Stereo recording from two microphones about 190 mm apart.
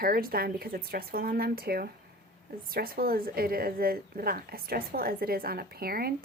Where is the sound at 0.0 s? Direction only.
50° right (ahead or behind).